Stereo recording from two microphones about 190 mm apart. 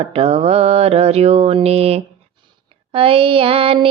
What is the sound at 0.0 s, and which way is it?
Child singing, 30° right (ahead or behind).